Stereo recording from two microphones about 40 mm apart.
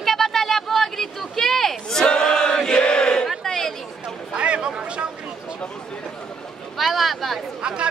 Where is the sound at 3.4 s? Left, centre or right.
Centre.